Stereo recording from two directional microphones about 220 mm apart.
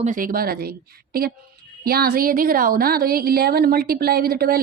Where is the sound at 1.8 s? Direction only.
45° right (ahead or behind).